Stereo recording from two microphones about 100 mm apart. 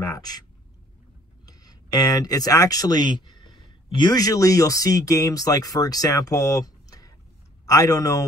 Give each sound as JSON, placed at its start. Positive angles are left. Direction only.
{"t": 0.0, "sound": "speech", "side_deg": 40}
{"t": 1.4, "sound": "a man's voice", "side_deg": 40}